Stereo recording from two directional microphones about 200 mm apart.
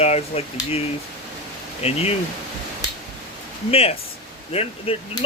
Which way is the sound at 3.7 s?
30° left (ahead or behind).